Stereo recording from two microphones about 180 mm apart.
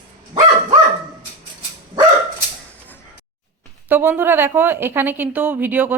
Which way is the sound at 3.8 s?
10° right (ahead or behind).